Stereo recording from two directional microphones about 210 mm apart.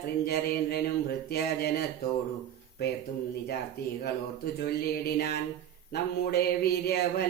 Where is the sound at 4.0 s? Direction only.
45° left (ahead or behind).